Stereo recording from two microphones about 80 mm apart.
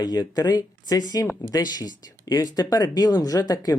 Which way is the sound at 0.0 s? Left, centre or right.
Left.